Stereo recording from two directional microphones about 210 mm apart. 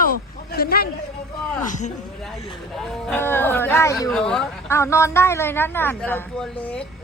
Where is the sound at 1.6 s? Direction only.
35° left (ahead or behind).